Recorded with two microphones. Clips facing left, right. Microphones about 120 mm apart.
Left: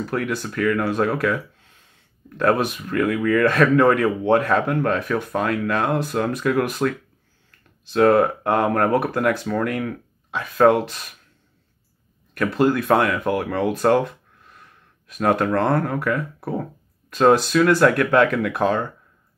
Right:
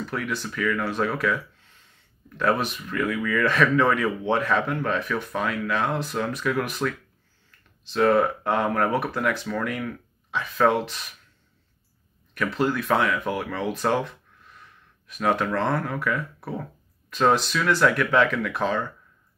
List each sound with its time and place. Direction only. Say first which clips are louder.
0.0 s speech: left 5 dB; 45° left (ahead or behind)
2.9 s speech: left 6 dB; 45° left (ahead or behind)
8.5 s speech: left 4 dB; 45° left (ahead or behind)
12.4 s speech: left 5 dB; 45° left (ahead or behind)